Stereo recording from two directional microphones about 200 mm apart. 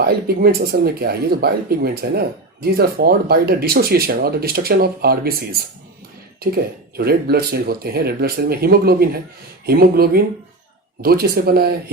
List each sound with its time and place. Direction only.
0.0 s speech: 50° right (ahead or behind)